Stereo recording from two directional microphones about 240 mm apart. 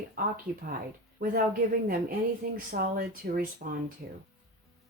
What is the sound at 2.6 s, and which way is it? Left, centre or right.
Speech, right.